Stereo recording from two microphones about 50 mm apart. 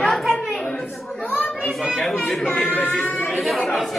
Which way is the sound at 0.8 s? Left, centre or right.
Left.